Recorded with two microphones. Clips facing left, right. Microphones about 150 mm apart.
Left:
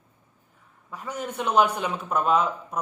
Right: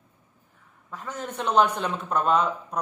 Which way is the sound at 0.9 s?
10° left (ahead or behind).